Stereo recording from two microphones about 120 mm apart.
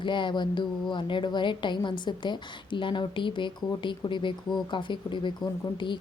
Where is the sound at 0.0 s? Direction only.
40° left (ahead or behind).